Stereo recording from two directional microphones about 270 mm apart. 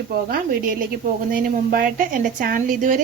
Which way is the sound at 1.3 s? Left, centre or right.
Right.